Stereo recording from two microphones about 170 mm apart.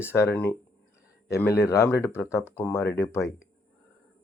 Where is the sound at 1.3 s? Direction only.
15° left (ahead or behind).